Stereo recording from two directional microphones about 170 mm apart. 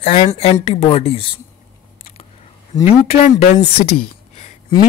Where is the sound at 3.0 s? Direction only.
40° left (ahead or behind).